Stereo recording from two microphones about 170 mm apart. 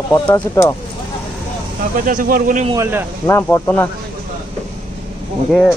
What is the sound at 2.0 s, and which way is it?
Speech, 55° right (ahead or behind).